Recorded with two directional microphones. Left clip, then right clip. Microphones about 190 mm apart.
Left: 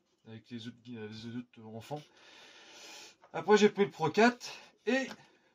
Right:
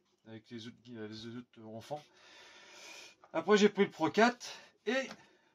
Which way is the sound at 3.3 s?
30° right (ahead or behind).